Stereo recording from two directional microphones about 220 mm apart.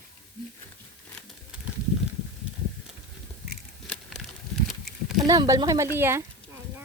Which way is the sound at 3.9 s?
Centre (ahead or behind).